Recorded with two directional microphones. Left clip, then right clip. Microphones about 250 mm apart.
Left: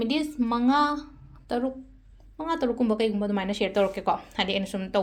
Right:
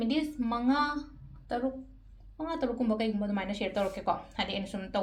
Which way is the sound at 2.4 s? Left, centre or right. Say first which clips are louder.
Left 6 dB; left.